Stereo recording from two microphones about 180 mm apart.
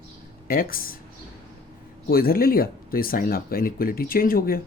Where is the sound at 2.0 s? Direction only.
55° left (ahead or behind).